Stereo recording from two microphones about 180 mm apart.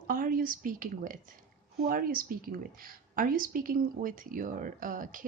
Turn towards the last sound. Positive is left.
turn(degrees=-50)  # may be behind; listen again after turning